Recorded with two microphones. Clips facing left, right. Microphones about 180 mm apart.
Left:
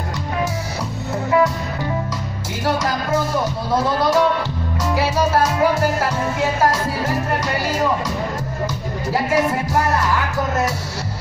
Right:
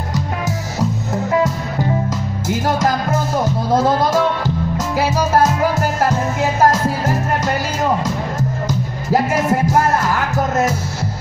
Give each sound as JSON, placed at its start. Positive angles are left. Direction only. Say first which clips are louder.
{"t": 2.6, "sound": "music", "louder": "right 2 dB", "side_deg": -45}
{"t": 4.9, "sound": "music", "louder": "right 2 dB", "side_deg": -45}